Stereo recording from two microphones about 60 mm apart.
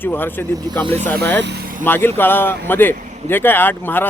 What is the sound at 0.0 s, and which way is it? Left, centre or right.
A man's voice, left.